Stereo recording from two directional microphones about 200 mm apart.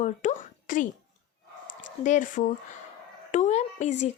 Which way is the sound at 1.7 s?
70° left (ahead or behind).